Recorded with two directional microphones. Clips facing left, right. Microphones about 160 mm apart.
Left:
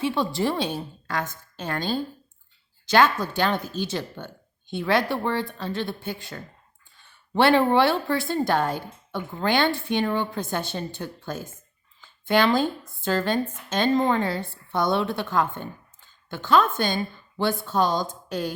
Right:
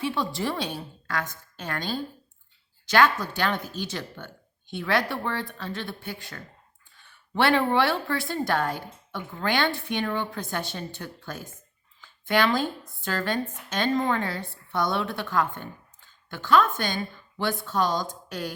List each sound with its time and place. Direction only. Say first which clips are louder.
0.0 s a woman's voice: left 4 dB; 25° left (ahead or behind)